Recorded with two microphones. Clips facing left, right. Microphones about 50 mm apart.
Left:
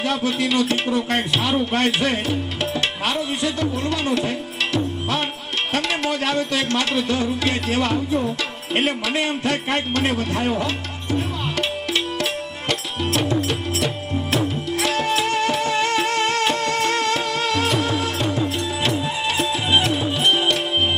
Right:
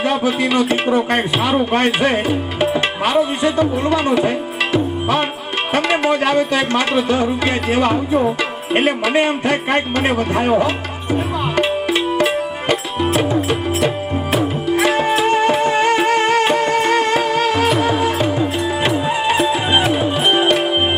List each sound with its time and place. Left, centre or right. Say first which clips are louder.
0.3 s speech: right 3 dB; right
8.7 s music: right 6 dB; right